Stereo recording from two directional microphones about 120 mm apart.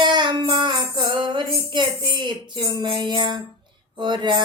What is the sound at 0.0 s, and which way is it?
Music, 40° right (ahead or behind).